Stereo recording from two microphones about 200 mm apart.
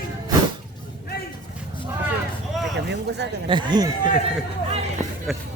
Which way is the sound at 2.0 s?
Centre (ahead or behind).